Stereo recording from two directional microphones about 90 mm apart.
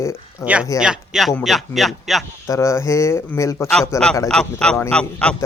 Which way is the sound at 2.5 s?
35° left (ahead or behind).